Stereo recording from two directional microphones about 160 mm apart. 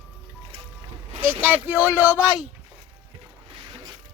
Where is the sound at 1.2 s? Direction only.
10° right (ahead or behind).